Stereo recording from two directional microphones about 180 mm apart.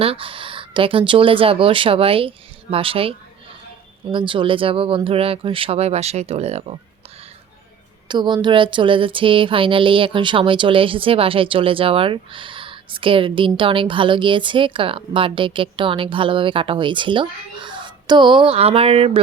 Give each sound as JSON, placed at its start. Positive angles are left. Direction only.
{"t": 0.0, "sound": "speech", "side_deg": -30}
{"t": 8.0, "sound": "speech", "side_deg": -25}